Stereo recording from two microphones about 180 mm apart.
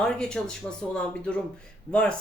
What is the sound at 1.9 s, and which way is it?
Speech, 5° left (ahead or behind).